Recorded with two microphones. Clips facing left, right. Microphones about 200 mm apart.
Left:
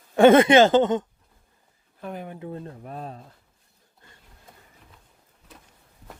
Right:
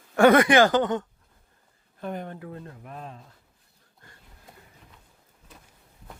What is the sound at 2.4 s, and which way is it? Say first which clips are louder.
Speech: left 4 dB; 30° left (ahead or behind).